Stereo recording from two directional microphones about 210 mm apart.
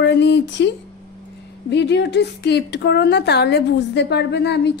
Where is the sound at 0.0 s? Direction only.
55° left (ahead or behind).